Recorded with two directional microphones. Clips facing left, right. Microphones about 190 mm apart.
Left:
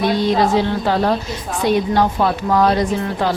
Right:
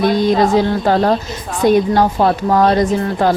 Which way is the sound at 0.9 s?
45° right (ahead or behind).